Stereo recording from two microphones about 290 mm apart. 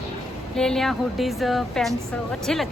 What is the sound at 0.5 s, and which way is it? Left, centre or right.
Speech, centre.